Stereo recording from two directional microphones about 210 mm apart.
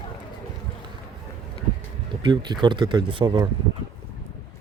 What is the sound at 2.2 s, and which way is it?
Speech, 20° right (ahead or behind).